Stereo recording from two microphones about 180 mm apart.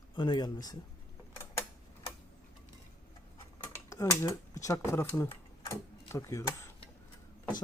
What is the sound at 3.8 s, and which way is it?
Speech, 15° left (ahead or behind).